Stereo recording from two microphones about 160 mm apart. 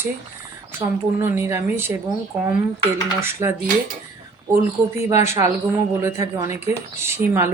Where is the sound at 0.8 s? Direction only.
30° right (ahead or behind).